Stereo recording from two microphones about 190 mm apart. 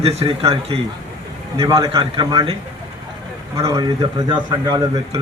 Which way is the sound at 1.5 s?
15° right (ahead or behind).